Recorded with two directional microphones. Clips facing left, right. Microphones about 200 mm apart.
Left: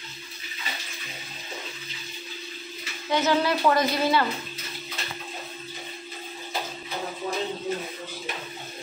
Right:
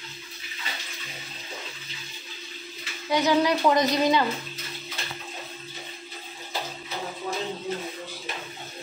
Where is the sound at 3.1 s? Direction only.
15° right (ahead or behind).